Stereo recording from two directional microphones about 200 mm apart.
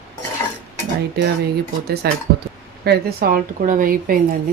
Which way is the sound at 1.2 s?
50° right (ahead or behind).